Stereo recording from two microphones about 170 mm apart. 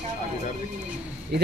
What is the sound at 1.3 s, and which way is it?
Speech, 70° right (ahead or behind).